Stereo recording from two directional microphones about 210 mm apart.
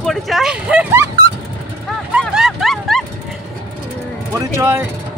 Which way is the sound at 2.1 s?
Centre (ahead or behind).